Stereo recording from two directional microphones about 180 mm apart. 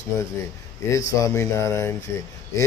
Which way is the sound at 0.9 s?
15° left (ahead or behind).